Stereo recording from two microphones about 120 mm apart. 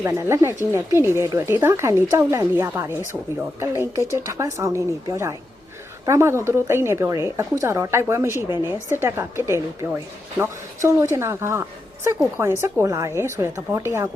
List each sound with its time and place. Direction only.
0.0 s speech: 25° right (ahead or behind)